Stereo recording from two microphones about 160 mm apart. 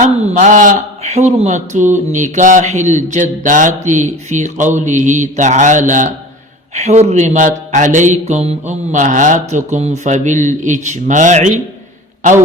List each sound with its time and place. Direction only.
0.0 s speech: 50° right (ahead or behind)